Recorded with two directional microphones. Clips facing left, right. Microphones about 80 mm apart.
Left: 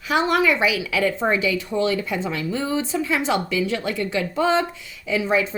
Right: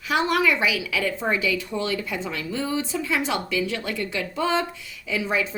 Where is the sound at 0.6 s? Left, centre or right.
Left.